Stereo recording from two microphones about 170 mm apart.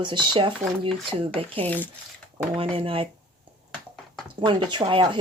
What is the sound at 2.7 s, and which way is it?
Speech, 35° right (ahead or behind).